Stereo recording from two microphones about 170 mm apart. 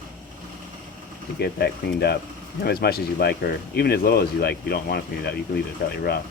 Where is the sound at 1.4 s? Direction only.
70° left (ahead or behind).